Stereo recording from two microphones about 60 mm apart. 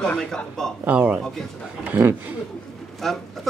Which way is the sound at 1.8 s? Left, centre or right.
Right.